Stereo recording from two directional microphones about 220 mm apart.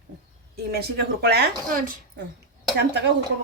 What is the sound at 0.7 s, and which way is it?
Speech, 45° right (ahead or behind).